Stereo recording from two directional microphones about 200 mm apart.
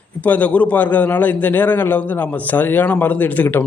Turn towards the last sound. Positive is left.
turn(degrees=10)  # may be behind; listen again after turning